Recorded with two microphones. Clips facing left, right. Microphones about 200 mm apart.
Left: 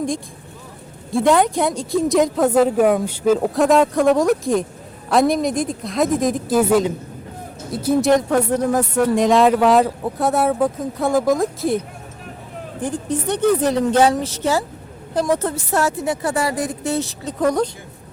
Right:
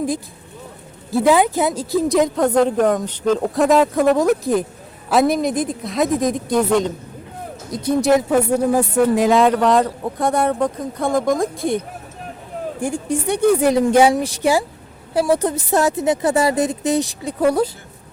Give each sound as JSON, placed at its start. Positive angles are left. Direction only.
{"t": 1.1, "sound": "speech", "side_deg": -5}
{"t": 8.1, "sound": "speech", "side_deg": -5}
{"t": 12.8, "sound": "a woman's voice", "side_deg": -10}